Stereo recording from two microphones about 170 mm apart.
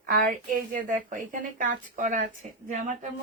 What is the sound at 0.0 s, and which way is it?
Speech, 60° right (ahead or behind).